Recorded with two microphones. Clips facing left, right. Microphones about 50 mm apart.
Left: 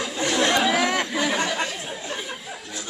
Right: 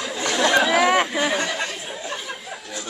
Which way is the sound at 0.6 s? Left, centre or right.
Centre.